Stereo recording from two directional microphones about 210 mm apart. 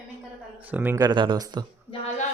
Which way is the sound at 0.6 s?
10° right (ahead or behind).